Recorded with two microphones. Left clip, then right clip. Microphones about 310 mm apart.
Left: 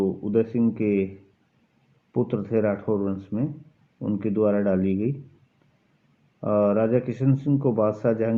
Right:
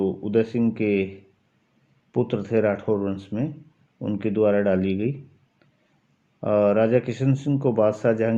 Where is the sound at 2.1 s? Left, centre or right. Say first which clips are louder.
Right 2 dB; right.